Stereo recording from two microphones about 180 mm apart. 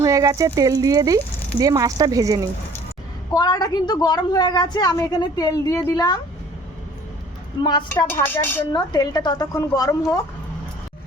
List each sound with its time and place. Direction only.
0.0 s speech: 20° right (ahead or behind)
3.3 s a woman's voice: 20° left (ahead or behind)
7.6 s a woman's voice: 25° left (ahead or behind)
7.9 s chopping: 10° left (ahead or behind)
8.7 s a woman's voice: 25° left (ahead or behind)